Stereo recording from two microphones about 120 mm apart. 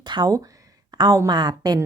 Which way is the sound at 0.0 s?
40° right (ahead or behind).